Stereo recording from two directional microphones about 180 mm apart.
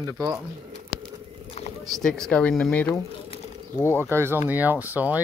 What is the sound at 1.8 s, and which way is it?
Speech, centre (ahead or behind).